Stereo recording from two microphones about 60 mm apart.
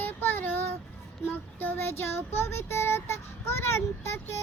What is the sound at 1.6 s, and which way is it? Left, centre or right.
Speech, left.